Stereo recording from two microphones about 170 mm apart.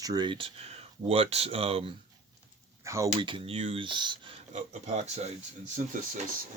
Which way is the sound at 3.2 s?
30° right (ahead or behind).